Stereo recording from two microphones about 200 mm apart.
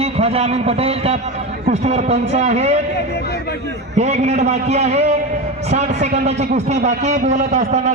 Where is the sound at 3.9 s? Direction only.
35° right (ahead or behind).